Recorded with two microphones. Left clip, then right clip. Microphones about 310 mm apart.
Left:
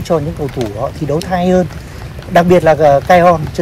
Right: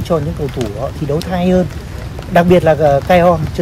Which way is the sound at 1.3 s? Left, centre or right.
Left.